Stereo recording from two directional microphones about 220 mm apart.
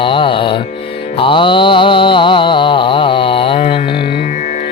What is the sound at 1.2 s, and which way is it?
Mantra, 20° left (ahead or behind).